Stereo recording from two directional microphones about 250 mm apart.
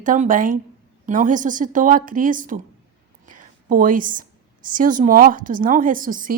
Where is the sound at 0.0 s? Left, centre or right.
Right.